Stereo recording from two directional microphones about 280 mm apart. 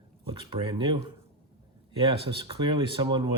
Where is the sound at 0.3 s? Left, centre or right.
Centre.